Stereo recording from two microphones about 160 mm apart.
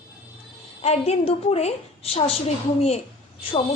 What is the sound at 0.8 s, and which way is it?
A woman's voice, 40° left (ahead or behind).